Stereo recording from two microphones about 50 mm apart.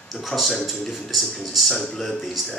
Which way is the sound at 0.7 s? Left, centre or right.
Centre.